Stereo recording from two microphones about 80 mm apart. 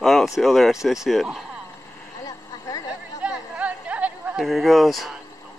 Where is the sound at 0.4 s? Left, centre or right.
Centre.